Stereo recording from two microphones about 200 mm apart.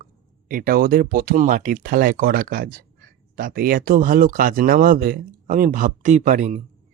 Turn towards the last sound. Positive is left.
turn(degrees=-40)  # may be behind; listen again after turning